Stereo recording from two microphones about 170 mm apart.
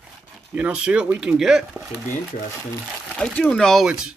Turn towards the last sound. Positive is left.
turn(degrees=-5)  # may be behind; listen again after turning